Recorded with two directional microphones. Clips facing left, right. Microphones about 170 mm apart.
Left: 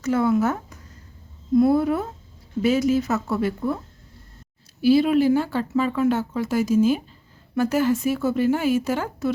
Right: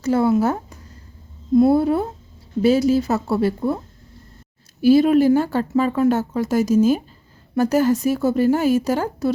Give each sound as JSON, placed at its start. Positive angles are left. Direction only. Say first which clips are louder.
{"t": 0.0, "sound": "a woman's voice", "louder": "right 3 dB", "side_deg": -30}
{"t": 4.8, "sound": "a woman's voice", "louder": "right 4 dB", "side_deg": -45}